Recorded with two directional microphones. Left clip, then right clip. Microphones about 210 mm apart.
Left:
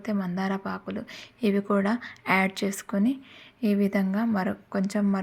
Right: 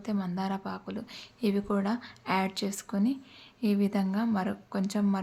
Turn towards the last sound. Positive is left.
turn(degrees=15)  # may be behind; listen again after turning